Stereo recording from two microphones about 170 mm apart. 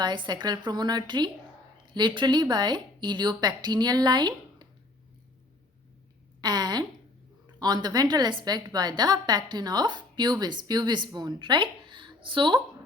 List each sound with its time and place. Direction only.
0.0 s a woman's voice: 25° right (ahead or behind)
6.4 s a sound: 25° right (ahead or behind)
7.6 s a woman's voice: 25° right (ahead or behind)